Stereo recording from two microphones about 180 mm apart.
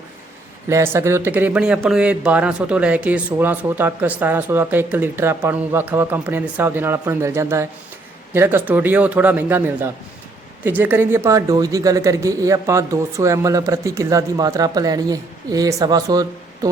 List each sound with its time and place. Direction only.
0.7 s speech: 15° right (ahead or behind)